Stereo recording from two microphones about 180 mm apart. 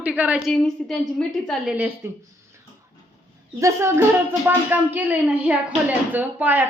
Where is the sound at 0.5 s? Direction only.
5° left (ahead or behind).